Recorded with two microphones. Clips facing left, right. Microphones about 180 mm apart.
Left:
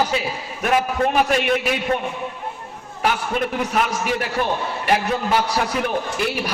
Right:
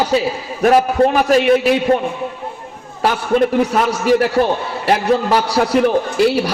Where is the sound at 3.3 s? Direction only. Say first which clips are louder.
Right 14 dB; 55° right (ahead or behind).